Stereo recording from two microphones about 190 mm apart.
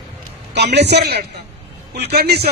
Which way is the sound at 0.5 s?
60° right (ahead or behind).